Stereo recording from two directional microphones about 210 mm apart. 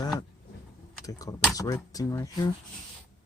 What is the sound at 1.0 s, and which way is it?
Speech, 15° left (ahead or behind).